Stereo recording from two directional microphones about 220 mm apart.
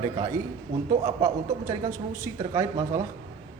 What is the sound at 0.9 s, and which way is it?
Speech, 15° right (ahead or behind).